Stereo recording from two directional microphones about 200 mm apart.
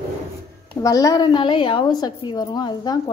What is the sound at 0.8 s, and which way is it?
A woman's voice, 15° left (ahead or behind).